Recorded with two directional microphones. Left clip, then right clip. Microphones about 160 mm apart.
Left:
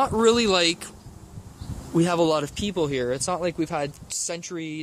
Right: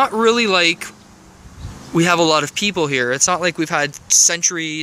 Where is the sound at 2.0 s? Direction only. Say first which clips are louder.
Right 7 dB; 5° right (ahead or behind).